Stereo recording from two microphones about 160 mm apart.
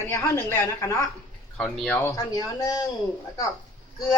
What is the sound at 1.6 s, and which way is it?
Speech, 5° left (ahead or behind).